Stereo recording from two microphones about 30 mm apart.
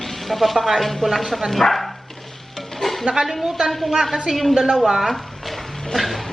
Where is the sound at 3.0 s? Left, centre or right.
Centre.